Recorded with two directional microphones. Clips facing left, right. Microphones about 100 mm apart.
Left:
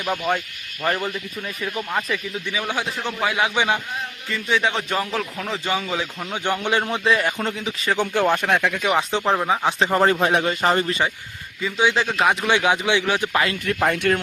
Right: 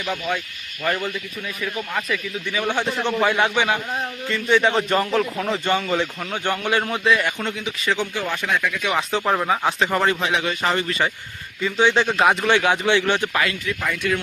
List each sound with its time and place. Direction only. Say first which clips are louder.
0.0 s speech: left 2 dB; 45° left (ahead or behind)
0.8 s speech: even; 30° left (ahead or behind)
2.5 s a man's voice: right 4 dB; 10° left (ahead or behind)
3.5 s a man's voice: even; 15° left (ahead or behind)
4.3 s a man's voice: right 3 dB; centre (ahead or behind)
6.3 s speech: even; 15° left (ahead or behind); by 8.0 s 40° left (ahead or behind)
8.1 s speech: left 5 dB; 55° left (ahead or behind)
8.8 s speech: left 1 dB; 30° left (ahead or behind)
11.6 s a man's voice: right 2 dB; 5° left (ahead or behind)
12.5 s a man's voice: right 1 dB; 15° left (ahead or behind)
13.3 s speech: left 1 dB; 30° left (ahead or behind)
13.7 s speech: left 4 dB; 60° left (ahead or behind)